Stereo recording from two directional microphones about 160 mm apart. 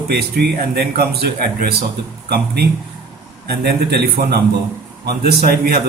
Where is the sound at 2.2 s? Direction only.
90° right.